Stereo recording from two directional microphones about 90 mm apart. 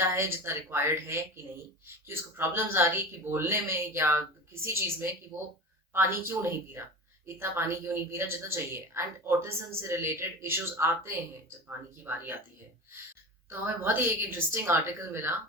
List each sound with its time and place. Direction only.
0.0 s a woman's voice: 30° right (ahead or behind)
13.5 s a woman's voice: 25° right (ahead or behind)